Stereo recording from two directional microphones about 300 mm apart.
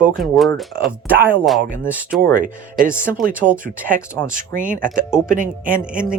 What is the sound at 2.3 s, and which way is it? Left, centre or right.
Speech, right.